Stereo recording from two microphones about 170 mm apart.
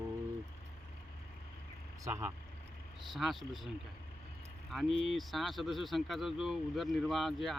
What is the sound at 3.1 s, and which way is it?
Speech, centre (ahead or behind).